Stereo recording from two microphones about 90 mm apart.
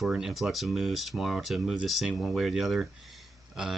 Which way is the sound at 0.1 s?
5° right (ahead or behind).